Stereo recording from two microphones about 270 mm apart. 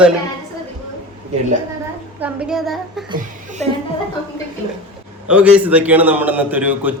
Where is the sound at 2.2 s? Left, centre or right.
Centre.